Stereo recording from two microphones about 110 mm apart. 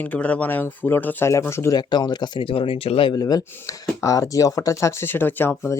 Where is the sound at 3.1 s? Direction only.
35° left (ahead or behind); by 5.8 s 20° left (ahead or behind).